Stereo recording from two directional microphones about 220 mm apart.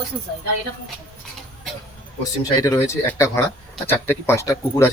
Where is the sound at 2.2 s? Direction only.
15° left (ahead or behind).